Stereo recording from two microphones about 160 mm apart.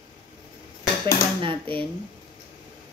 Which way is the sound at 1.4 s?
35° right (ahead or behind).